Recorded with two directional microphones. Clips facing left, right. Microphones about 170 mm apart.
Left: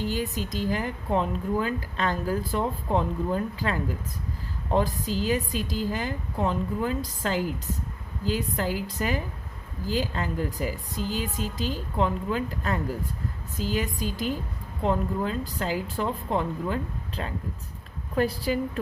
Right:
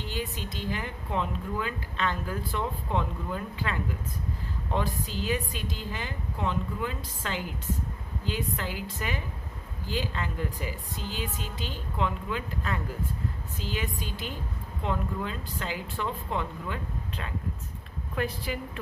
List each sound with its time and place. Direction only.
0.0 s speech: 40° left (ahead or behind)